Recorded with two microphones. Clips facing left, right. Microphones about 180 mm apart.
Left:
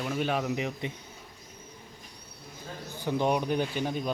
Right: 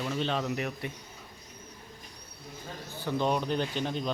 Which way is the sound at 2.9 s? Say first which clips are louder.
Left 2 dB; 15° left (ahead or behind).